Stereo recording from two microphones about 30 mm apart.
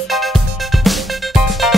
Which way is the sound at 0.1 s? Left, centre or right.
Centre.